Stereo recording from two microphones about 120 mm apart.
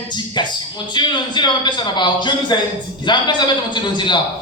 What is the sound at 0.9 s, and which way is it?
A man's voice, 40° left (ahead or behind).